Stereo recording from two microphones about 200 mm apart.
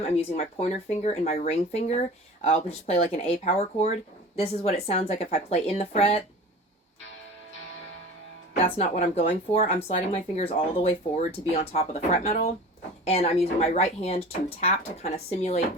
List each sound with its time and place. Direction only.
0.0 s speech: 30° left (ahead or behind)
8.5 s speech: 35° left (ahead or behind)